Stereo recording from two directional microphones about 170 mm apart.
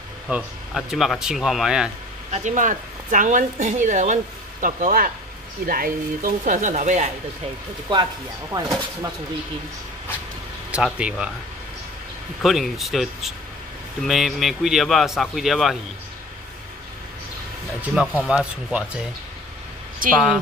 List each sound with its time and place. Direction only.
0.3 s speech: 5° right (ahead or behind)
2.3 s speech: 45° right (ahead or behind)
7.9 s speech: 25° right (ahead or behind)
10.7 s speech: 5° right (ahead or behind)
12.4 s speech: centre (ahead or behind)
17.8 s speech: 5° right (ahead or behind)